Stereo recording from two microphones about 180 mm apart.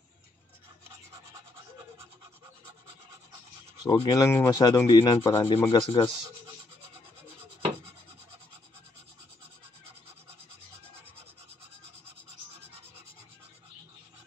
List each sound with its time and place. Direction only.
3.8 s rub: 25° left (ahead or behind)